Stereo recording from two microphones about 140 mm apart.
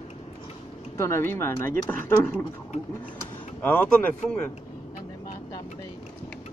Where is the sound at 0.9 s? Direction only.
20° left (ahead or behind).